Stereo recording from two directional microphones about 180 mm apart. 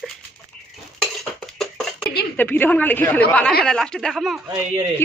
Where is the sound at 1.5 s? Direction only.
Centre (ahead or behind).